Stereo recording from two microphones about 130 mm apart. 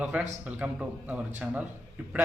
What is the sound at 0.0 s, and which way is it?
A man's voice, 10° right (ahead or behind).